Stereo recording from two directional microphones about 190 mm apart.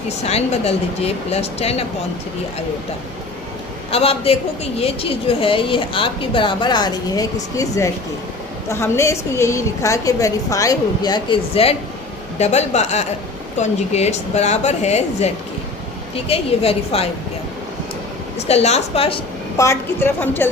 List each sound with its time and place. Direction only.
0.3 s a woman's voice: 35° left (ahead or behind)
3.9 s a woman's voice: 30° left (ahead or behind)
18.3 s a woman's voice: 35° left (ahead or behind)
19.5 s a woman's voice: 15° left (ahead or behind)